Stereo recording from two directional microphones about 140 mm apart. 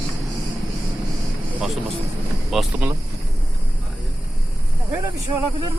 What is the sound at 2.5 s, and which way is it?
Speech, centre (ahead or behind).